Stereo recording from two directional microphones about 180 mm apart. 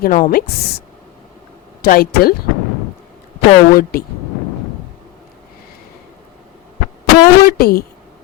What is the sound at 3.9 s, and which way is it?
Speech, 60° left (ahead or behind).